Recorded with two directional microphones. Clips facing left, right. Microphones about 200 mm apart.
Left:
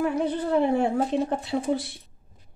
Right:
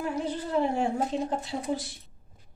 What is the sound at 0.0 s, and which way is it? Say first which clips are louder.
Speech: left 6 dB; 60° left (ahead or behind).